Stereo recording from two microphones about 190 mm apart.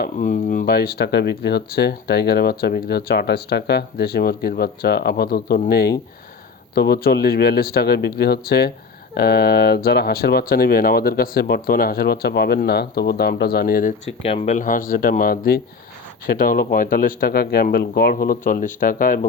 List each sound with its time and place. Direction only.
0.0 s speech: 45° left (ahead or behind)
0.6 s speech: 55° left (ahead or behind)
14.2 s speech: 30° left (ahead or behind); by 19.3 s 45° left (ahead or behind)